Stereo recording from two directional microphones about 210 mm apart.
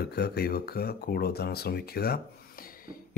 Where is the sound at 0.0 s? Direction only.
50° left (ahead or behind).